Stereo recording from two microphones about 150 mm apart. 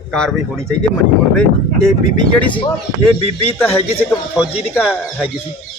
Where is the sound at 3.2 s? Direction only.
40° left (ahead or behind).